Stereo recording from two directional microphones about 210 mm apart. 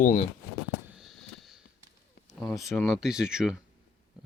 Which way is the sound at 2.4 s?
Centre (ahead or behind).